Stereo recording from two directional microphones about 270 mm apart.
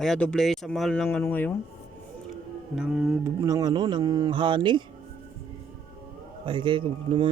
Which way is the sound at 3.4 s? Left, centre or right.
Centre.